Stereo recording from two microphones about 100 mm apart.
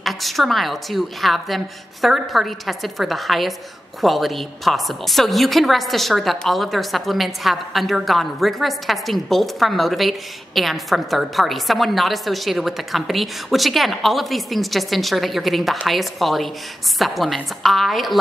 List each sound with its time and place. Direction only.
0.0 s a woman's voice: centre (ahead or behind)